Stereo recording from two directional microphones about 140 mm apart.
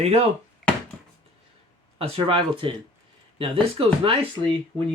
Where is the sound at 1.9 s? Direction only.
40° right (ahead or behind).